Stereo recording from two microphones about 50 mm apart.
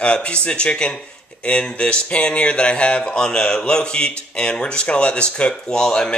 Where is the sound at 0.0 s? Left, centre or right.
Left.